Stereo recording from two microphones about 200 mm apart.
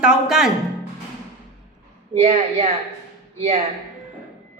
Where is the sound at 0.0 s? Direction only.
5° right (ahead or behind).